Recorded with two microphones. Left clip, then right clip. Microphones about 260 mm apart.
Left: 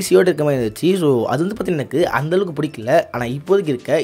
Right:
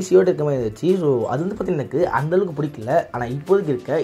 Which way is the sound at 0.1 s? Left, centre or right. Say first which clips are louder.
Left 2 dB; left.